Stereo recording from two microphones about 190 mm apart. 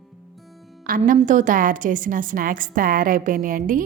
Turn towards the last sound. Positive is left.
turn(degrees=-45)  # may be behind; listen again after turning